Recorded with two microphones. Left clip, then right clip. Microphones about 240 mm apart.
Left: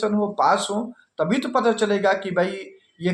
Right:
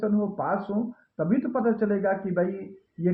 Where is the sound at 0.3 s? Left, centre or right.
Centre.